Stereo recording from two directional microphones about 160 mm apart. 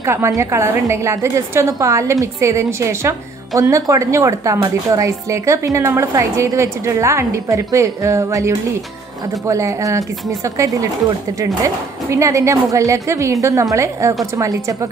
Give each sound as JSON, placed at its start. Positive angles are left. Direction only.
{"t": 0.0, "sound": "a woman's voice", "side_deg": -15}